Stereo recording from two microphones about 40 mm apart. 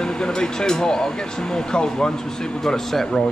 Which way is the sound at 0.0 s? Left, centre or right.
Centre.